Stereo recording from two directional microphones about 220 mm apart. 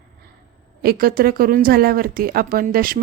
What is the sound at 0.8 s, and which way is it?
Speech, 45° right (ahead or behind).